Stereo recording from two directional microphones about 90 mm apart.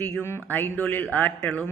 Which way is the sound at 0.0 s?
25° left (ahead or behind).